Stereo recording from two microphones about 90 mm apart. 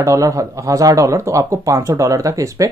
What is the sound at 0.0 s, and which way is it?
Speech, 35° right (ahead or behind).